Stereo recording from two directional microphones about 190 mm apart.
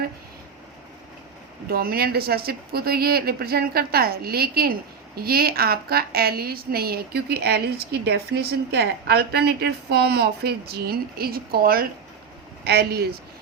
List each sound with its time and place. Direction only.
1.7 s a woman's voice: 50° right (ahead or behind)